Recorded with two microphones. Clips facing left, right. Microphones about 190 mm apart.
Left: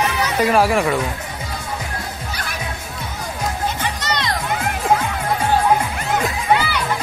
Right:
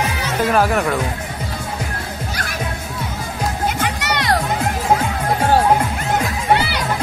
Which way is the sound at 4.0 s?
65° right (ahead or behind).